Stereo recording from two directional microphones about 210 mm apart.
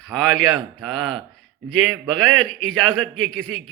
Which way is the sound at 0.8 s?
Centre (ahead or behind).